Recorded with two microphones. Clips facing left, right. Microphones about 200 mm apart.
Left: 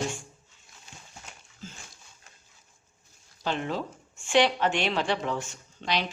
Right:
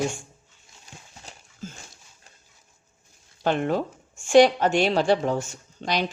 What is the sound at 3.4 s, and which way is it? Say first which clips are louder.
Speech: right 7 dB; 55° right (ahead or behind).